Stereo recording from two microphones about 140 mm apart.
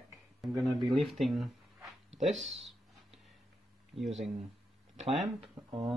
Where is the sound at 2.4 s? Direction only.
Centre (ahead or behind).